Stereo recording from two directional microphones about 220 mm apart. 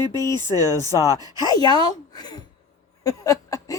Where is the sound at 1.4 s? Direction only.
20° left (ahead or behind).